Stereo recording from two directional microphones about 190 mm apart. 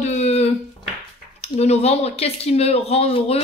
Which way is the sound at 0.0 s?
35° left (ahead or behind).